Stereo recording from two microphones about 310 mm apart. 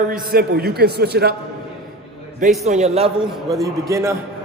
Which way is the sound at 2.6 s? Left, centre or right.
Right.